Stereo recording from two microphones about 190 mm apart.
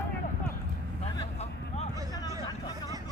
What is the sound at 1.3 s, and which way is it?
Vehicle, 35° left (ahead or behind).